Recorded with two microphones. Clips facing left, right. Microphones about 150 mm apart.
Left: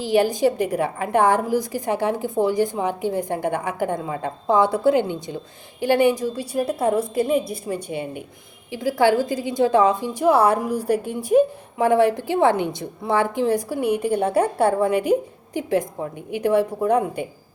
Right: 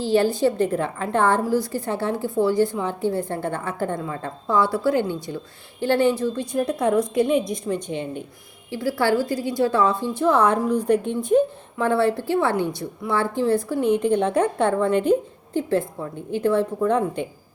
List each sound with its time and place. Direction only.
0.0 s a woman's voice: 15° left (ahead or behind)